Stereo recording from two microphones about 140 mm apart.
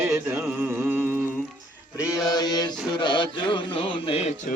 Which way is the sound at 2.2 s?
30° left (ahead or behind).